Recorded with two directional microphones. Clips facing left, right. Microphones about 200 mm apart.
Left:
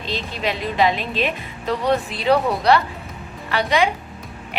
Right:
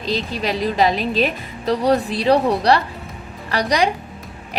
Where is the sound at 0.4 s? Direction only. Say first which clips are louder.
Right 1 dB; 40° right (ahead or behind).